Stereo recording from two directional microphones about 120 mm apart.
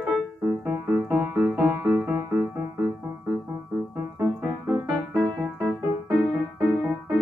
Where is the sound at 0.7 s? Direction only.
20° right (ahead or behind).